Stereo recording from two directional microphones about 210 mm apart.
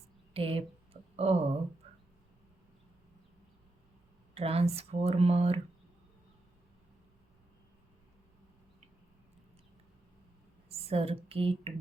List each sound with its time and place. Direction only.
0.3 s speech: 25° right (ahead or behind)
4.4 s speech: 30° right (ahead or behind)
10.7 s speech: 30° right (ahead or behind)